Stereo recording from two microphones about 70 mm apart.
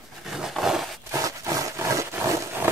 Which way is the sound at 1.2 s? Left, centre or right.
Right.